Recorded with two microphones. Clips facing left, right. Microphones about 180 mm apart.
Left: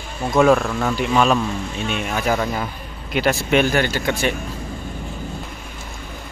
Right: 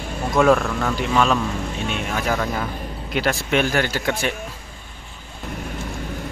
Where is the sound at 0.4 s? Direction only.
5° left (ahead or behind).